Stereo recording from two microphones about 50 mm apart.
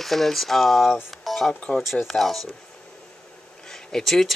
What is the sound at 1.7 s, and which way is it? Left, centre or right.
Speech, centre.